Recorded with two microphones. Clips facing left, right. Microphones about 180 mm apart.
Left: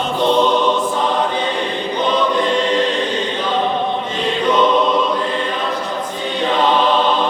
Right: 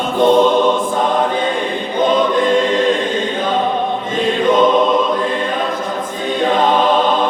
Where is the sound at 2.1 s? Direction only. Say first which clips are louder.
Right 3 dB; 50° right (ahead or behind).